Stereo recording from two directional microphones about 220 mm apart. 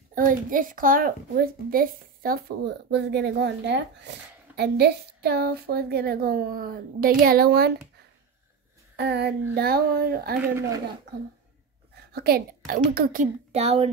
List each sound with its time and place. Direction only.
0.1 s a woman's voice: 40° right (ahead or behind)
8.9 s a woman's voice: 50° right (ahead or behind)
10.4 s speech: 10° right (ahead or behind)
12.1 s a woman's voice: 45° right (ahead or behind); by 13.8 s 30° right (ahead or behind)